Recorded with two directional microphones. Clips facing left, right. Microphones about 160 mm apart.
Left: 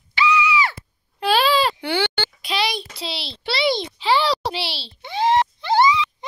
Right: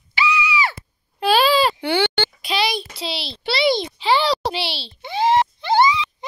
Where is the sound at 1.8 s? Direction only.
20° right (ahead or behind).